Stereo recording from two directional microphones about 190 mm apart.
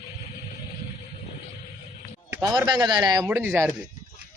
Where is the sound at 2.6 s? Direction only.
20° right (ahead or behind).